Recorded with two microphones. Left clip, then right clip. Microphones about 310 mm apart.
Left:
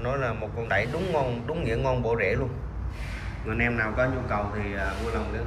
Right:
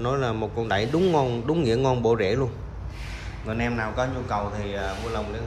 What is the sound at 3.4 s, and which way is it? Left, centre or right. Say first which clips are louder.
A man's voice: left 1 dB; centre.